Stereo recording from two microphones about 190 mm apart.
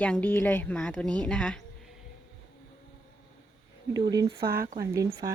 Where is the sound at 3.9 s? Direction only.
20° right (ahead or behind).